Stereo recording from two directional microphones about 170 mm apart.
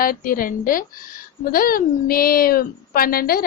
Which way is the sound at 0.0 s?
55° left (ahead or behind).